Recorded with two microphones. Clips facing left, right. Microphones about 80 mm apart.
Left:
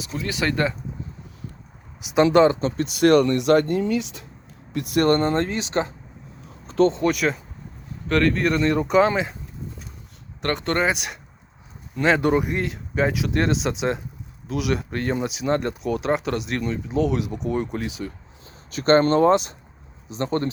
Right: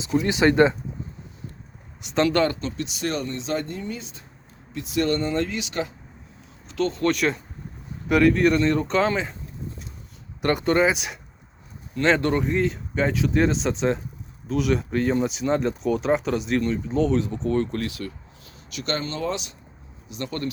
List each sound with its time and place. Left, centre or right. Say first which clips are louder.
0.0 s speech: right 6 dB; right
2.0 s speech: left 4 dB; centre
2.2 s speech: left 6 dB; centre
2.6 s speech: left 8 dB; left
4.7 s speech: left 5 dB; left
6.7 s a sound: left 7 dB; left
7.1 s speech: even; centre
8.0 s speech: right 2 dB; centre
10.4 s speech: right 2 dB; centre
18.5 s speech: left 12 dB; left